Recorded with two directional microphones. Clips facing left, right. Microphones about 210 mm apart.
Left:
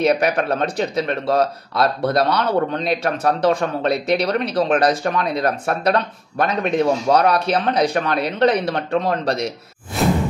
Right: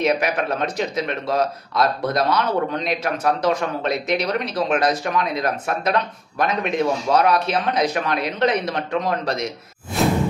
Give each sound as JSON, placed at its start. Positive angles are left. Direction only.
{"t": 0.0, "sound": "speech", "side_deg": 35}
{"t": 9.9, "sound": "whoosh", "side_deg": 0}